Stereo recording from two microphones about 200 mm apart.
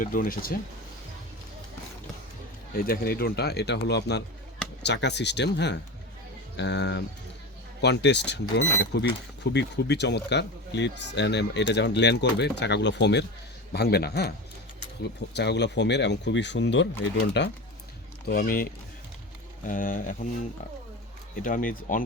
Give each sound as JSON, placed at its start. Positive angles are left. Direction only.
{"t": 0.0, "sound": "speech", "side_deg": 45}
{"t": 2.7, "sound": "speech", "side_deg": 50}
{"t": 18.3, "sound": "speech", "side_deg": 45}
{"t": 21.4, "sound": "speech", "side_deg": 45}